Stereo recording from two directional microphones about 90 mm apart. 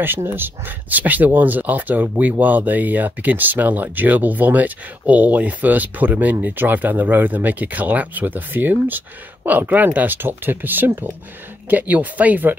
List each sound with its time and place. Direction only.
0.0 s speech: 25° right (ahead or behind)